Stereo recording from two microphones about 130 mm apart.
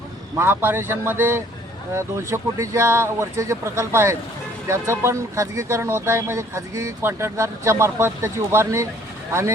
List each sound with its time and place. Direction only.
0.3 s speech: 20° right (ahead or behind)